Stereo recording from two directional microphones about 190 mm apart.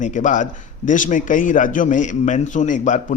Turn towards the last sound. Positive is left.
turn(degrees=40)  # may be behind; listen again after turning